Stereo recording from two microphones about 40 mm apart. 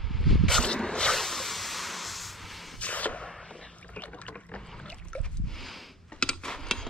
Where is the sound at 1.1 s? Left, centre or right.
Centre.